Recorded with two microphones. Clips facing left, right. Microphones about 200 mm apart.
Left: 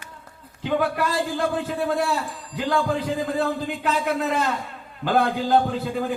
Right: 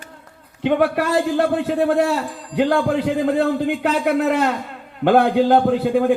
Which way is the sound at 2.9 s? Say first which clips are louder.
Right 6 dB; 70° right (ahead or behind).